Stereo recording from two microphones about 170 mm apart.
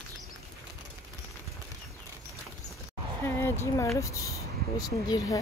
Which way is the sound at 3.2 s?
15° left (ahead or behind).